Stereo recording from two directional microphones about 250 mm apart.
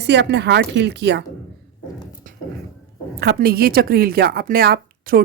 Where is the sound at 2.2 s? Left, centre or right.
Right.